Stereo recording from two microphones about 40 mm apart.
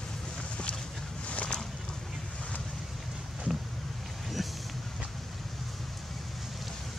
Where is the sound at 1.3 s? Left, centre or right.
Left.